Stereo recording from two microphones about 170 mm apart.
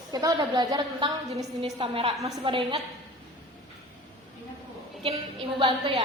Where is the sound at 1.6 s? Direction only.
35° right (ahead or behind).